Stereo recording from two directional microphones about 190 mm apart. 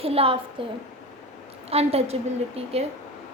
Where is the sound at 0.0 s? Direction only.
30° right (ahead or behind).